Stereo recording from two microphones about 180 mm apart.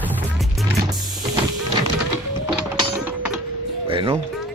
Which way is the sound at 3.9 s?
25° right (ahead or behind).